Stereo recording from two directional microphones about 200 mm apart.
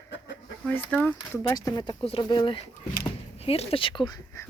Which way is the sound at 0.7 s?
10° left (ahead or behind).